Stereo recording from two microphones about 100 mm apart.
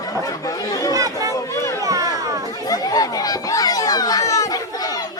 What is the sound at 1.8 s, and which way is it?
Children playing, 35° right (ahead or behind).